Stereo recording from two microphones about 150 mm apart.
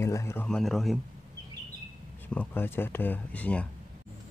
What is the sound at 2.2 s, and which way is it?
Speech, 10° left (ahead or behind).